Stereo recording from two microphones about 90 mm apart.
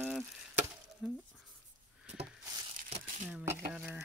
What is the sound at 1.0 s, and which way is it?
Speech, 5° right (ahead or behind).